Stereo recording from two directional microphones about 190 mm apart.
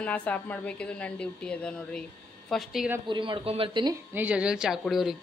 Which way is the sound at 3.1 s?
25° right (ahead or behind).